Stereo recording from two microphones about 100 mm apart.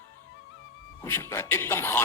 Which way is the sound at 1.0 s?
25° left (ahead or behind).